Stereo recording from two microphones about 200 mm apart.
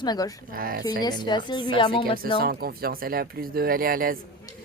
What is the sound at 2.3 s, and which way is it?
Speech, 45° right (ahead or behind).